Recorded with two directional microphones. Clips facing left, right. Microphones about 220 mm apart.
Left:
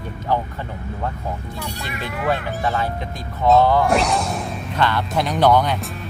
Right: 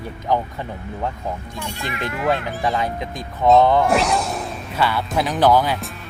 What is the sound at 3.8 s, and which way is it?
Speech, centre (ahead or behind).